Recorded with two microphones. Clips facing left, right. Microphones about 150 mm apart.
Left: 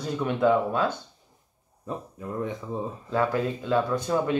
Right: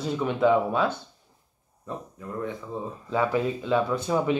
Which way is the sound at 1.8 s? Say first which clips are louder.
Left 2 dB; 15° left (ahead or behind).